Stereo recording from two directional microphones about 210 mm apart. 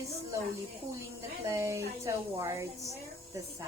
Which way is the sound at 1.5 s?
15° right (ahead or behind).